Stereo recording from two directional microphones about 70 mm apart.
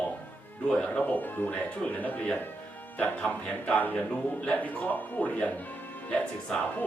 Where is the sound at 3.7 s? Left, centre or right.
Left.